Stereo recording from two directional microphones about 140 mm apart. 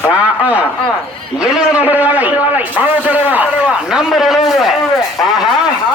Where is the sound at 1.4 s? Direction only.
5° right (ahead or behind).